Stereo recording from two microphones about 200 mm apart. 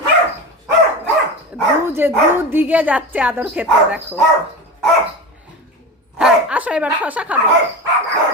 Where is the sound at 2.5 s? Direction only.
10° right (ahead or behind).